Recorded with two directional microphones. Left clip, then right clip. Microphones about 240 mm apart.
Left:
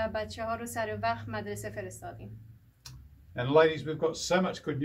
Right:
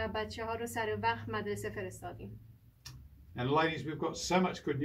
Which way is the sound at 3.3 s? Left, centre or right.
Centre.